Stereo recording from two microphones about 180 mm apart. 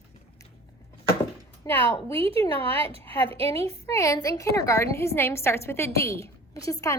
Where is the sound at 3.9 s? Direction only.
20° left (ahead or behind).